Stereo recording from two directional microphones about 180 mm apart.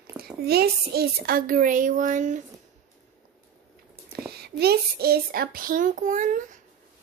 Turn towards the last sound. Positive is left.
turn(degrees=-45)  # may be behind; listen again after turning